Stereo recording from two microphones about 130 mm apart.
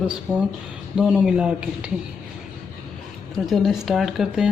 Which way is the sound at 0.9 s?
5° right (ahead or behind).